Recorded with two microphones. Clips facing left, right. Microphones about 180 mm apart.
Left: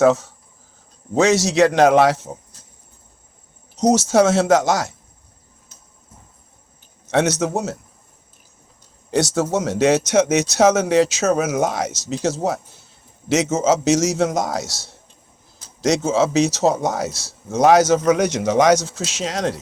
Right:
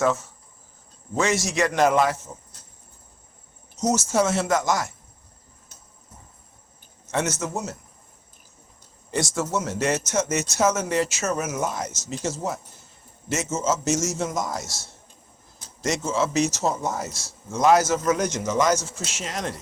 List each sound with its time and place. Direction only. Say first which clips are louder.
0.0 s speech: left 8 dB; 75° left (ahead or behind)
3.9 s speech: left 7 dB; 75° left (ahead or behind)
7.1 s speech: left 8 dB; 75° left (ahead or behind)
9.0 s speech: left 7 dB; 70° left (ahead or behind)